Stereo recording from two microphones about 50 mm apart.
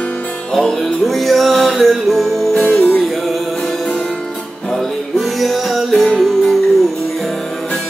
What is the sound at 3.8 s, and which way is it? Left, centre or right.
Music, centre.